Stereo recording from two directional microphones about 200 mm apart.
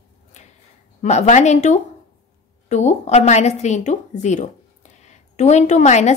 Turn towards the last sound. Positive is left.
turn(degrees=35)  # may be behind; listen again after turning